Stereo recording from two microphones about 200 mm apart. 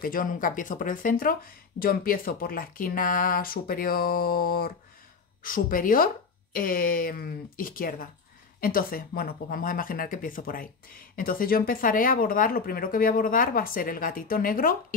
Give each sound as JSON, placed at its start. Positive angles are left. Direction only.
{"t": 0.0, "sound": "speech", "side_deg": 45}